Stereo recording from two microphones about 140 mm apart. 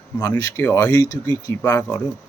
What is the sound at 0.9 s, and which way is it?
Speech, 25° left (ahead or behind).